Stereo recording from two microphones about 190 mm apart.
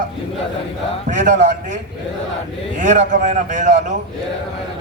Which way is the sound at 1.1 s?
40° right (ahead or behind).